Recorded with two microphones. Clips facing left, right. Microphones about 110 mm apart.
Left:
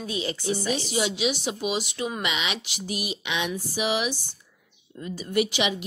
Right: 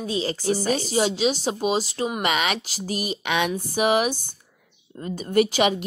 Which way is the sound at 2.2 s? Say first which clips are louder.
Right 6 dB; 50° right (ahead or behind).